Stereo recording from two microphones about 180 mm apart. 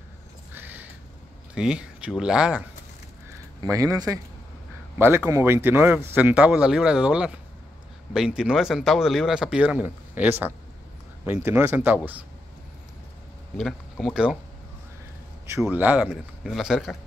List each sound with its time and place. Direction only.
0.5 s a sound: 10° right (ahead or behind)
1.5 s speech: 5° right (ahead or behind)
3.6 s speech: 20° right (ahead or behind)
13.6 s speech: 5° left (ahead or behind)
15.6 s speech: 10° right (ahead or behind)